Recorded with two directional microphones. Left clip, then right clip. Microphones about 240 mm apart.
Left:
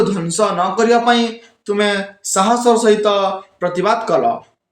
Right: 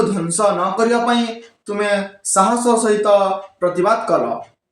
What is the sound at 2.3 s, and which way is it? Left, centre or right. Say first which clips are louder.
A man's voice: left 1 dB; left.